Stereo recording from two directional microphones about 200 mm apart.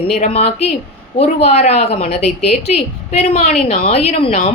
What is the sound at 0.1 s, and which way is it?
A woman's voice, 30° left (ahead or behind).